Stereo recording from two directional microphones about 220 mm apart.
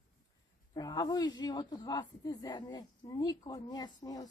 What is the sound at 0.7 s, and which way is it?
Speech, 20° left (ahead or behind).